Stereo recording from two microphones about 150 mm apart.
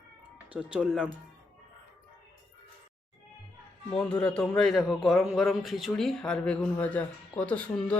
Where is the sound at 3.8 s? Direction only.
5° left (ahead or behind).